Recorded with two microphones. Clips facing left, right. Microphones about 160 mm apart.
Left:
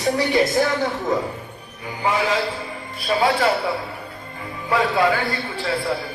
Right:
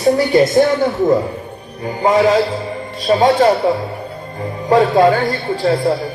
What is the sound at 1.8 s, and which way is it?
Speech, 35° right (ahead or behind).